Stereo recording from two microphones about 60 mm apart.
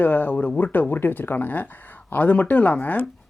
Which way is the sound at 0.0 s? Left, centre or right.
Left.